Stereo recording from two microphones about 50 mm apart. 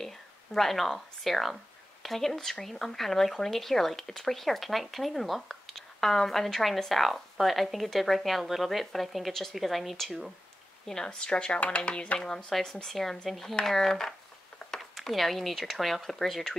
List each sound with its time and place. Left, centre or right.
0.0 s speech: centre
10.9 s speech: centre
12.2 s speech: centre